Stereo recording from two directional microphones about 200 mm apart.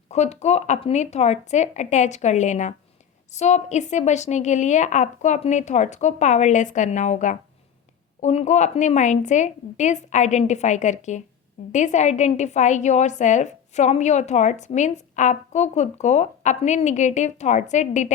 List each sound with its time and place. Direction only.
0.1 s a woman's voice: 35° left (ahead or behind)